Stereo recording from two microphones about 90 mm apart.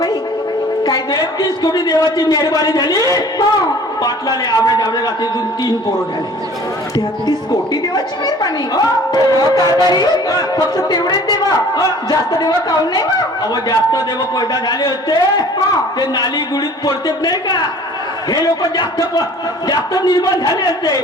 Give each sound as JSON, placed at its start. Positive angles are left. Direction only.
{"t": 0.9, "sound": "music", "side_deg": 50}
{"t": 6.9, "sound": "music", "side_deg": 50}
{"t": 18.8, "sound": "music", "side_deg": 45}